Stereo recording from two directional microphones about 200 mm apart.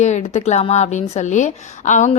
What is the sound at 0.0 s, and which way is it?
A woman's voice, 35° left (ahead or behind).